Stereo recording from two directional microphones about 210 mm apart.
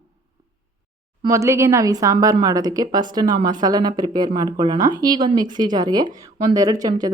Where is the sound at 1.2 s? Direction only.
15° right (ahead or behind).